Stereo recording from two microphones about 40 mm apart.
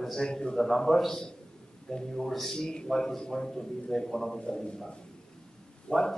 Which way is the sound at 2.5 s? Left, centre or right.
Centre.